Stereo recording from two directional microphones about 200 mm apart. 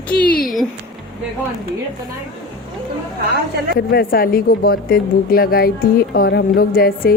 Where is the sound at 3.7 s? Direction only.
50° left (ahead or behind).